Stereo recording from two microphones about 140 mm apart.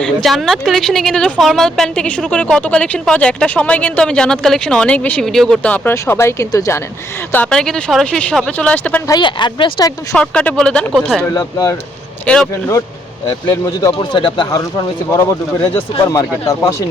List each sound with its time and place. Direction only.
0.0 s speech: centre (ahead or behind); by 6.8 s 20° left (ahead or behind)
7.3 s speech: 10° left (ahead or behind)
9.0 s speech: 30° left (ahead or behind)
10.2 s speech: 5° left (ahead or behind)
11.2 s speech: 25° left (ahead or behind)
12.2 s speech: 10° left (ahead or behind)
13.5 s speech: 25° left (ahead or behind)